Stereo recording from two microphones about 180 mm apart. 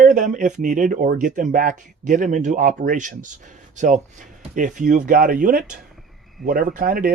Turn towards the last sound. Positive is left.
turn(degrees=-55)  # may be behind; listen again after turning